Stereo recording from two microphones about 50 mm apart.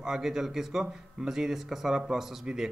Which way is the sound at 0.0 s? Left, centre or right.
Centre.